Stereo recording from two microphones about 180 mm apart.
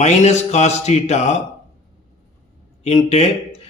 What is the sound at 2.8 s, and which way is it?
Speech, 40° left (ahead or behind).